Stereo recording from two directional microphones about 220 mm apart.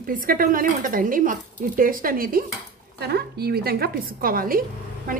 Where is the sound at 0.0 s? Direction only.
40° right (ahead or behind).